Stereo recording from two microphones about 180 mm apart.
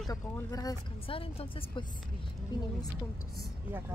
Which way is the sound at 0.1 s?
20° left (ahead or behind).